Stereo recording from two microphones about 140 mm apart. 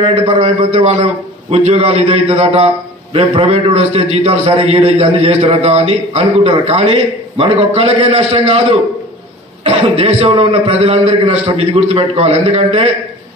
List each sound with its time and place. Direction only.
0.0 s a man's voice: 40° right (ahead or behind)
9.7 s a man's voice: 45° right (ahead or behind)